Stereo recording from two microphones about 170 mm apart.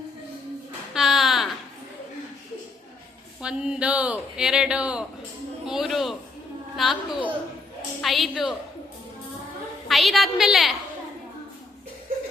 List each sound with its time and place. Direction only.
0.9 s a sound: centre (ahead or behind)
3.4 s speech: 5° right (ahead or behind)
9.9 s speech: centre (ahead or behind)